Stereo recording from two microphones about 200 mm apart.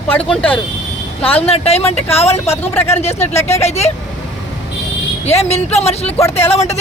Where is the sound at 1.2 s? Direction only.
30° left (ahead or behind).